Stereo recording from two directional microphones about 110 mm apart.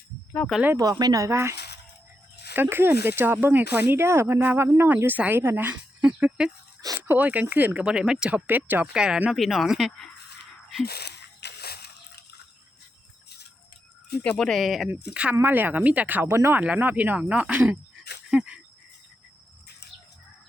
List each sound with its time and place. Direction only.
0.8 s speech: 35° right (ahead or behind)
2.6 s speech: 20° right (ahead or behind); by 10.1 s centre (ahead or behind)
14.3 s speech: 5° left (ahead or behind)
14.8 s speech: 10° right (ahead or behind)
18.3 s a sound: 5° right (ahead or behind)